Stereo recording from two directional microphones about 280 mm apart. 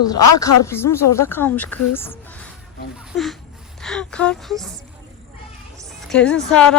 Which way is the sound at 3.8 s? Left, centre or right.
Centre.